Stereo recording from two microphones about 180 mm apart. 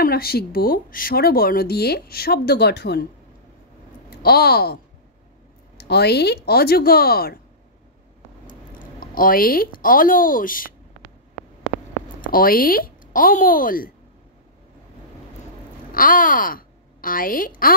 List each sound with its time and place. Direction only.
0.0 s speech: 60° left (ahead or behind)
4.2 s speech: 60° left (ahead or behind)
5.8 s speech: 65° left (ahead or behind)
8.7 s speech: 50° left (ahead or behind)
12.2 s speech: 50° left (ahead or behind)
15.9 s a woman's voice: 50° left (ahead or behind)